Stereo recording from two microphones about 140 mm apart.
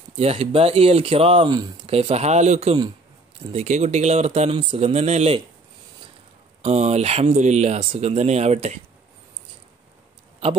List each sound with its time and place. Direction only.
0.2 s speech: 45° right (ahead or behind)
1.9 s speech: 45° right (ahead or behind)
6.6 s speech: 50° right (ahead or behind)